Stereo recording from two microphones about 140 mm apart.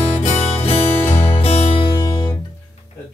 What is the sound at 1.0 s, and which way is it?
Music, 15° left (ahead or behind).